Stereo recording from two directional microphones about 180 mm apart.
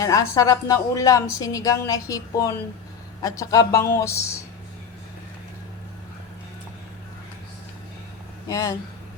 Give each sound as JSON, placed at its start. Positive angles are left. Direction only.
{"t": 0.0, "sound": "a woman's voice", "side_deg": 20}
{"t": 8.4, "sound": "a woman's voice", "side_deg": 20}